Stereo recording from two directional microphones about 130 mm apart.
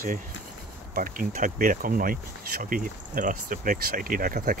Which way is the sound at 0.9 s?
90° right.